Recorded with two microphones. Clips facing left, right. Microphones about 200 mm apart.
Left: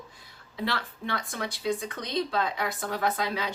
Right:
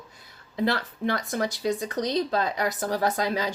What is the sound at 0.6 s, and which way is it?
Speech, 40° right (ahead or behind).